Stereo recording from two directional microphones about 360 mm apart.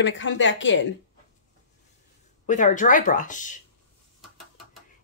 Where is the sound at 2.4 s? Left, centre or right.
Left.